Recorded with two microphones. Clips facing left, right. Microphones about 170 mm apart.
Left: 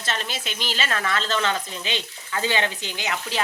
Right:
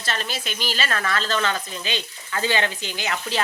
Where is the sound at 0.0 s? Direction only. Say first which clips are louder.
Right 1 dB; 20° left (ahead or behind).